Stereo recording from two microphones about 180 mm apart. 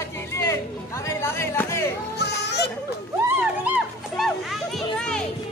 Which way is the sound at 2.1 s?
65° left (ahead or behind).